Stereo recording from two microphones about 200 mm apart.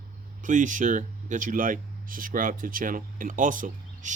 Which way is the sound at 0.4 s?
40° right (ahead or behind).